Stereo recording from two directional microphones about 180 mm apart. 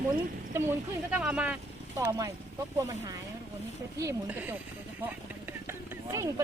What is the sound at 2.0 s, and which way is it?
Speech, 20° right (ahead or behind).